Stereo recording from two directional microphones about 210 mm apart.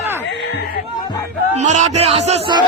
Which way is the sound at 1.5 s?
35° right (ahead or behind).